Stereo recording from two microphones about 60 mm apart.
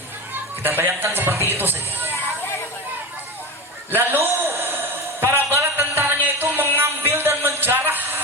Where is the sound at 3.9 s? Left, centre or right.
Right.